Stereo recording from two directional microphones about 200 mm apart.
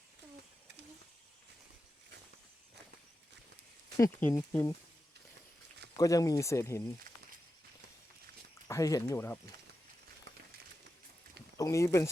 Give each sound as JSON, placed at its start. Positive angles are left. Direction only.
{"t": 3.9, "sound": "speech", "side_deg": 15}
{"t": 6.0, "sound": "speech", "side_deg": 15}
{"t": 8.6, "sound": "speech", "side_deg": 15}
{"t": 11.5, "sound": "speech", "side_deg": 15}